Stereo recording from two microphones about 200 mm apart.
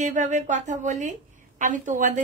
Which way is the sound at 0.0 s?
35° right (ahead or behind).